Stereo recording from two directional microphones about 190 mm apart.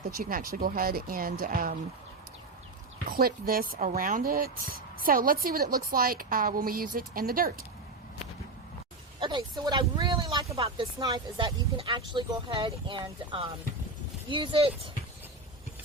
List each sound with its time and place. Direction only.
0.2 s speech: 50° right (ahead or behind)
3.1 s speech: 50° right (ahead or behind)
9.2 s speech: 25° right (ahead or behind)